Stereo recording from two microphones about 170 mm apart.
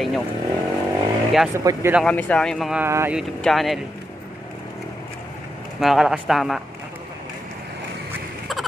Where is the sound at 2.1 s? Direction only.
5° left (ahead or behind).